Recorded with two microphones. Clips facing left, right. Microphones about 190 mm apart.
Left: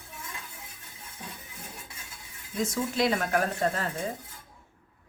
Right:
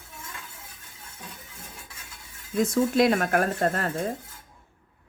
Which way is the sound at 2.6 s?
55° right (ahead or behind).